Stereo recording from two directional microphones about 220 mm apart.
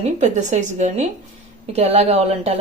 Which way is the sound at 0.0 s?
30° right (ahead or behind).